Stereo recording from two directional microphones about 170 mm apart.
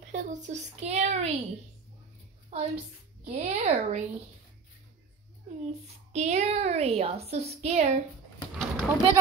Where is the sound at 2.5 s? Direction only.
45° right (ahead or behind).